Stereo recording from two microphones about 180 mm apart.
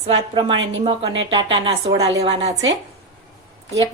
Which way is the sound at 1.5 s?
25° right (ahead or behind).